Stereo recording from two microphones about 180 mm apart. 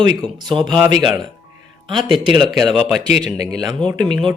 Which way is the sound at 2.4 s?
Centre (ahead or behind).